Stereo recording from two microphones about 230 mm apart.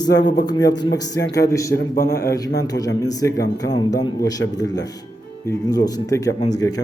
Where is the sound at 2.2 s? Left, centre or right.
Centre.